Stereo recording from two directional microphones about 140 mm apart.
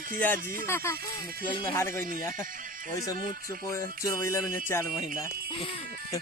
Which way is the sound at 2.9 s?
25° left (ahead or behind).